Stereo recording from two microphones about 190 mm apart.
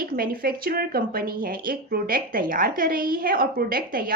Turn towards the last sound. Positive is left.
turn(degrees=-50)  # may be behind; listen again after turning